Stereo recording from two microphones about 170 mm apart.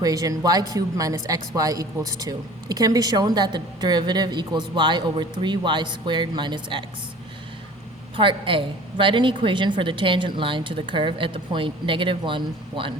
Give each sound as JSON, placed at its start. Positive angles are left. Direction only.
{"t": 0.0, "sound": "speech", "side_deg": -20}
{"t": 8.1, "sound": "speech", "side_deg": -30}